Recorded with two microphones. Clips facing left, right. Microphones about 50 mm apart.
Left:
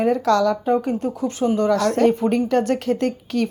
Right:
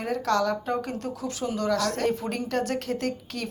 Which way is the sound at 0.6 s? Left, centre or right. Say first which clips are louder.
Left 9 dB; left.